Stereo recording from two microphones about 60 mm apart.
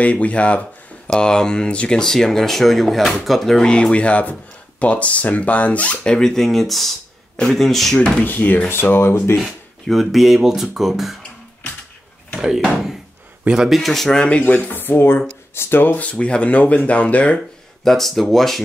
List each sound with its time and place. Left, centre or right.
0.0 s speech: left
6.1 s speech: centre
8.0 s speech: left
9.4 s speech: centre
12.4 s speech: centre
13.7 s speech: centre
14.5 s speech: left
17.8 s speech: centre